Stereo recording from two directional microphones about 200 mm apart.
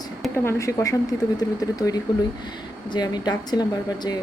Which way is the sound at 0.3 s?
15° left (ahead or behind).